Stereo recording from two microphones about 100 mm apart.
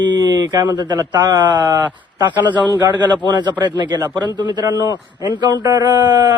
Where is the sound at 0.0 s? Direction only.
45° right (ahead or behind).